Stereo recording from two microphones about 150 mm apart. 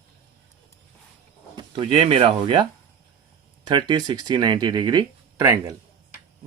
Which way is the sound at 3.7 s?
30° right (ahead or behind).